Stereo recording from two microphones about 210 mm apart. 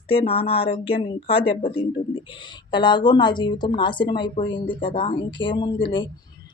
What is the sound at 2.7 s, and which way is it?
Speech, 20° left (ahead or behind).